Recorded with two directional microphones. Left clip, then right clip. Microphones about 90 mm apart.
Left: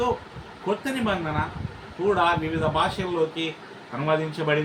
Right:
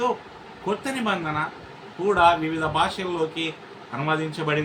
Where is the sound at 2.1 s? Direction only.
25° right (ahead or behind).